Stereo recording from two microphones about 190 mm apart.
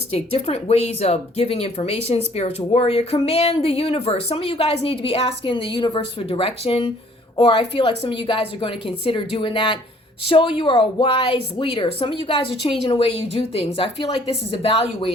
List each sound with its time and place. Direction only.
0.1 s a woman's voice: 30° left (ahead or behind)